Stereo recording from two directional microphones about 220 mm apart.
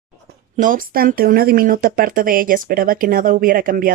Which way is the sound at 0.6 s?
40° right (ahead or behind).